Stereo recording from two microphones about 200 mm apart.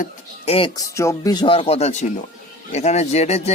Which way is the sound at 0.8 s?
15° left (ahead or behind).